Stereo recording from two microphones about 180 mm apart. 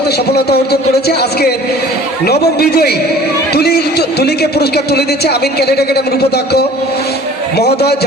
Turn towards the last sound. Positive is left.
turn(degrees=65)  # may be behind; listen again after turning